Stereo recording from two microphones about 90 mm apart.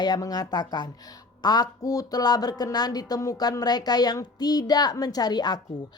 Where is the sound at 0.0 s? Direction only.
45° left (ahead or behind).